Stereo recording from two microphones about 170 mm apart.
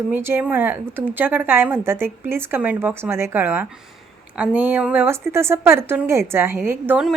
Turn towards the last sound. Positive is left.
turn(degrees=-10)  # may be behind; listen again after turning